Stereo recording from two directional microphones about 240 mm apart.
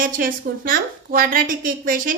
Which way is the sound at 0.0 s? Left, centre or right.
Right.